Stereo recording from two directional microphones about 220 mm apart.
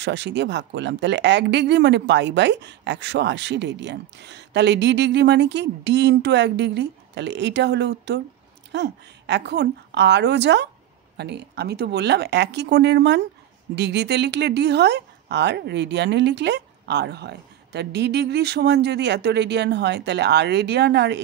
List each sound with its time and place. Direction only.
0.0 s speech: 50° right (ahead or behind)